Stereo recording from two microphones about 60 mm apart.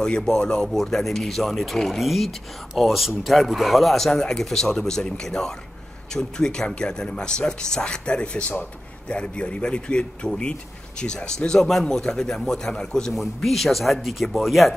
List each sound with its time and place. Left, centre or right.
0.0 s speech: centre
13.1 s speech: centre